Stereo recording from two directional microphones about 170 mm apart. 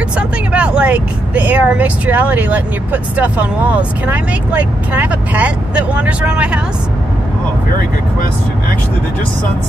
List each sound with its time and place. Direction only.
0.5 s speech: 5° right (ahead or behind)